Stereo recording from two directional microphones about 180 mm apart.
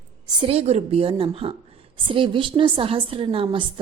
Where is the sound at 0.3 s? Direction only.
25° right (ahead or behind).